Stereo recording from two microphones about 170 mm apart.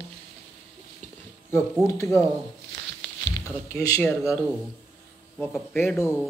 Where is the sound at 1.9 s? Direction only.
15° left (ahead or behind).